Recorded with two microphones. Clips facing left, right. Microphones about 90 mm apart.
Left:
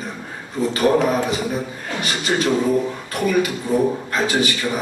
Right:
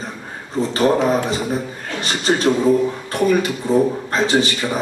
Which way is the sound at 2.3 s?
35° right (ahead or behind).